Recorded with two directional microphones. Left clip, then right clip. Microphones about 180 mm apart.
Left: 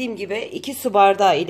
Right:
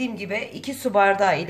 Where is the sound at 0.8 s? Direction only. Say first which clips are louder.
Left 4 dB; 35° left (ahead or behind).